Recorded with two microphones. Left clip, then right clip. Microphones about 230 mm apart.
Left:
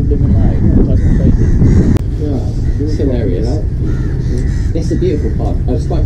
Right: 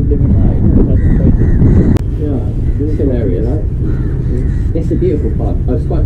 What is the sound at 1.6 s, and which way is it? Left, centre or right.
Speech, left.